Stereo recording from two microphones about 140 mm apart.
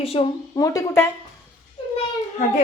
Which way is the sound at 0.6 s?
20° left (ahead or behind).